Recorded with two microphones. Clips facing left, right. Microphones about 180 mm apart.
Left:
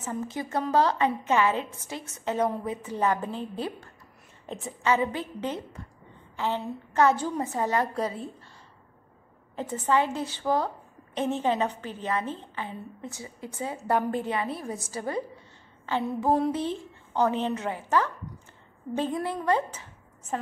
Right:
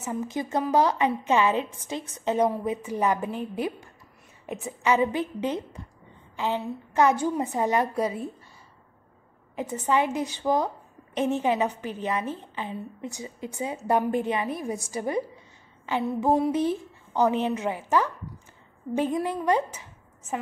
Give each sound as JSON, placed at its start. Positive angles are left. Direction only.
{"t": 0.0, "sound": "a woman's voice", "side_deg": -15}
{"t": 9.6, "sound": "a woman's voice", "side_deg": -15}